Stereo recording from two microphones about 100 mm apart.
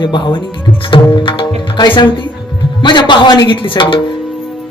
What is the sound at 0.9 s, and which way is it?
Tabla, 55° left (ahead or behind).